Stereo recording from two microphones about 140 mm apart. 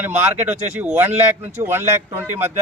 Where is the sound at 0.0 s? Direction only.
15° right (ahead or behind).